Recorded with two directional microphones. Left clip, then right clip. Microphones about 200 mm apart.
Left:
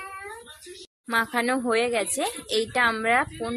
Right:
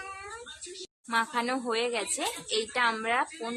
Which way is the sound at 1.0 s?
25° left (ahead or behind).